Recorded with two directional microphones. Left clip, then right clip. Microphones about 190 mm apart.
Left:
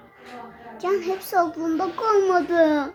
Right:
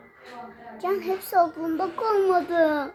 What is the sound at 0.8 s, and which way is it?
A child's voice, 20° right (ahead or behind).